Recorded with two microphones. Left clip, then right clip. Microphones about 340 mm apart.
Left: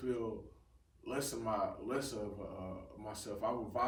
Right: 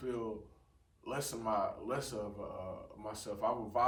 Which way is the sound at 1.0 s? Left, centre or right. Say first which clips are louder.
Right 1 dB; centre.